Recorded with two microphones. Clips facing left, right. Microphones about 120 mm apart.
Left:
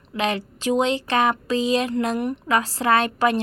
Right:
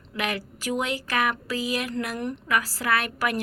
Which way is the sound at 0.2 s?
25° left (ahead or behind).